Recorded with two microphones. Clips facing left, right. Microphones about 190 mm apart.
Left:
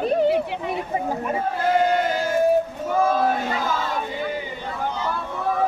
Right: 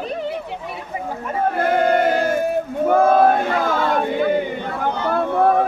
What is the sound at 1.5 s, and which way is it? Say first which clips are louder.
Speech: right 3 dB; 60° right (ahead or behind).